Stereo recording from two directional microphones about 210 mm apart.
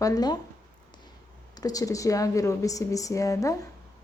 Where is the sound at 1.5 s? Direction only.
15° left (ahead or behind).